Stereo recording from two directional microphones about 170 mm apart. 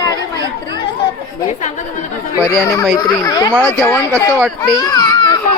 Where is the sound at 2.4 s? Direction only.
15° left (ahead or behind).